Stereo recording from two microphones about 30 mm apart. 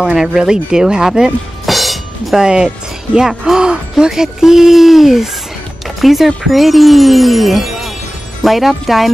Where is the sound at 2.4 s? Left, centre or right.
Right.